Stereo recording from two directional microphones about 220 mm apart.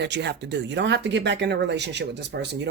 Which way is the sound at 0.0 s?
50° right (ahead or behind).